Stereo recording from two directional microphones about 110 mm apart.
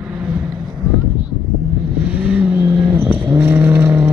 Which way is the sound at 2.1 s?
10° right (ahead or behind).